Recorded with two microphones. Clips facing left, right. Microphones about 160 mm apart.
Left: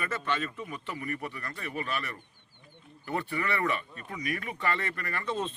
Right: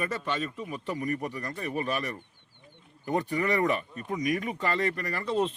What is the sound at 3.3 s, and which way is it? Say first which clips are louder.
Speech: right 4 dB; 40° right (ahead or behind).